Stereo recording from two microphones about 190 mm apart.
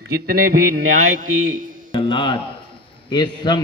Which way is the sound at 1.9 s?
25° left (ahead or behind).